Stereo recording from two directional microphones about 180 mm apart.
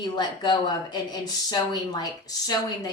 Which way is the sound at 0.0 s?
25° left (ahead or behind).